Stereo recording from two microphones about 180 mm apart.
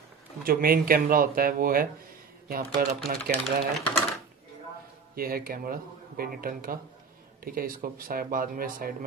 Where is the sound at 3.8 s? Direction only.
Centre (ahead or behind).